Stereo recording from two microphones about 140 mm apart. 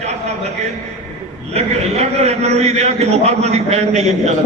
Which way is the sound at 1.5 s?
50° right (ahead or behind).